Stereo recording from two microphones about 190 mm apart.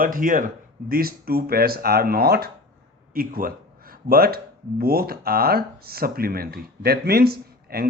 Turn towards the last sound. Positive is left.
turn(degrees=-55)  # may be behind; listen again after turning